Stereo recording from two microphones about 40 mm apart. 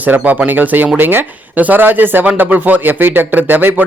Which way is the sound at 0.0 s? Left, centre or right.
Right.